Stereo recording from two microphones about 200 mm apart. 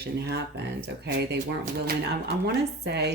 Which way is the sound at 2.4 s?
55° right (ahead or behind).